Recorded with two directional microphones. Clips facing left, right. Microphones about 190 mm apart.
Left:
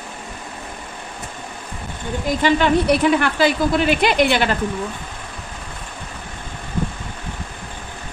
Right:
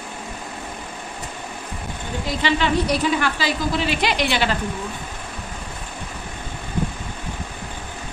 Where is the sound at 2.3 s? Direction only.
50° left (ahead or behind).